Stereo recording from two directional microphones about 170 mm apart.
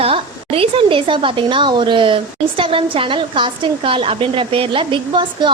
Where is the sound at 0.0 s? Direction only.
35° right (ahead or behind).